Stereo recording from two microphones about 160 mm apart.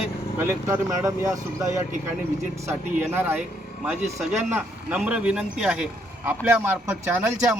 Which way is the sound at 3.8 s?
Centre (ahead or behind).